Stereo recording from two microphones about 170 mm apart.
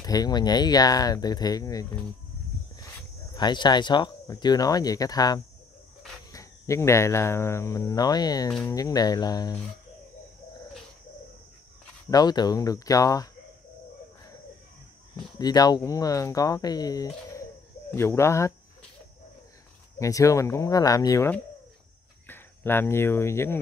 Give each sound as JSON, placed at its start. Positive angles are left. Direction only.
{"t": 0.0, "sound": "speech", "side_deg": 20}
{"t": 3.3, "sound": "speech", "side_deg": 25}
{"t": 12.1, "sound": "speech", "side_deg": 25}
{"t": 15.3, "sound": "speech", "side_deg": 20}
{"t": 20.0, "sound": "speech", "side_deg": 20}
{"t": 22.3, "sound": "speech", "side_deg": 15}